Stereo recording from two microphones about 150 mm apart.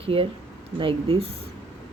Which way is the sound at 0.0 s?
40° right (ahead or behind).